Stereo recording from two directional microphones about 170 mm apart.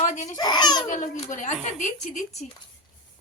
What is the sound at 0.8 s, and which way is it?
A woman's voice, 45° left (ahead or behind).